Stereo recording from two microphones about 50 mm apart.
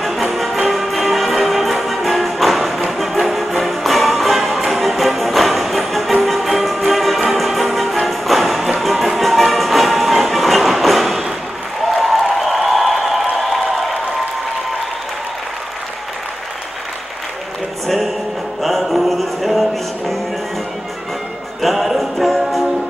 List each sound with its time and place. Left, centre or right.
0.0 s music: centre
12.0 s a sound: centre
17.8 s music: centre
21.5 s music: centre